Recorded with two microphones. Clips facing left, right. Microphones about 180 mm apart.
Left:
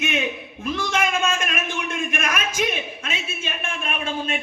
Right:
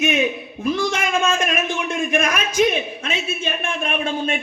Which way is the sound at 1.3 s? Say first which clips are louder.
Right 5 dB; 40° right (ahead or behind).